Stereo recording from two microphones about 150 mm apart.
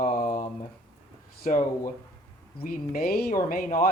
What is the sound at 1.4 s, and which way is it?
Speech, 60° left (ahead or behind).